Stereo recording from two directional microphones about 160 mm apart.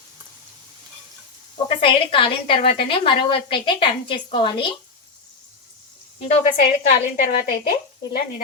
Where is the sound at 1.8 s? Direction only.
35° left (ahead or behind).